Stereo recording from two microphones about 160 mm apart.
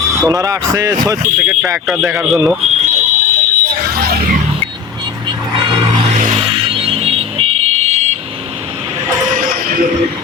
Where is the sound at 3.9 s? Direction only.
75° right (ahead or behind).